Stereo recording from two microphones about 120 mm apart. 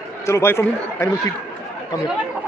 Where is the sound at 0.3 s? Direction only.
20° left (ahead or behind).